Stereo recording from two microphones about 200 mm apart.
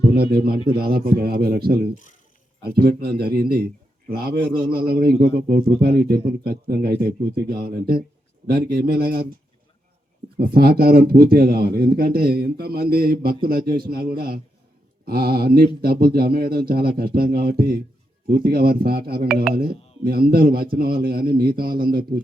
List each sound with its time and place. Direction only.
0.1 s a man's voice: 50° right (ahead or behind)
10.3 s speech: 50° right (ahead or behind)